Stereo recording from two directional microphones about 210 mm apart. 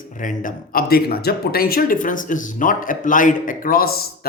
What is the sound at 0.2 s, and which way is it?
Speech, 40° left (ahead or behind).